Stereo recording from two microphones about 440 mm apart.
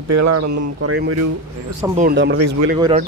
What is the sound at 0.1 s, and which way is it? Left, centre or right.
Speech, right.